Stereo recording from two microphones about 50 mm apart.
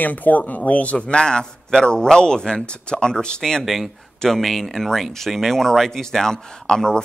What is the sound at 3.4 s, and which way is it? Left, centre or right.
Speech, centre.